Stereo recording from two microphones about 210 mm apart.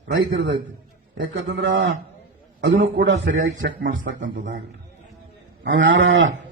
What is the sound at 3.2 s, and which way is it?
A man's voice, 45° right (ahead or behind).